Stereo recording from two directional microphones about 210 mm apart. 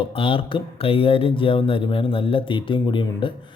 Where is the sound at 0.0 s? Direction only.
25° left (ahead or behind).